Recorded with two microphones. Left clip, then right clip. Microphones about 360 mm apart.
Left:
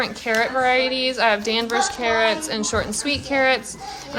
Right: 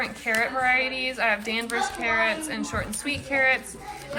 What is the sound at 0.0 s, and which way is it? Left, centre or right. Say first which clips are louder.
A woman's voice: left 4 dB; centre.